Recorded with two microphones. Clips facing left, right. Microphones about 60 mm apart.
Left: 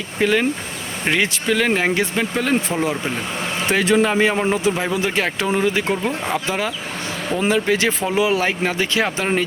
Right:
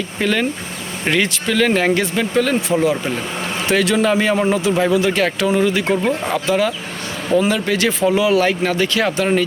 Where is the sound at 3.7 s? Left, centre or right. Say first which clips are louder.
Right 1 dB; left.